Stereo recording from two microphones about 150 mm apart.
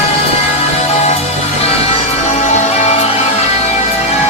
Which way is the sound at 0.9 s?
45° left (ahead or behind).